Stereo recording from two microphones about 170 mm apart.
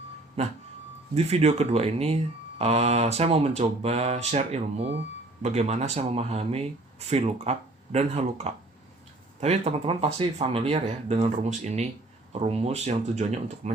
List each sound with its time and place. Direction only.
0.4 s speech: 40° right (ahead or behind)